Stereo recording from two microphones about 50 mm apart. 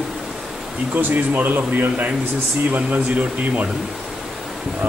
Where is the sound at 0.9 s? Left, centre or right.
Right.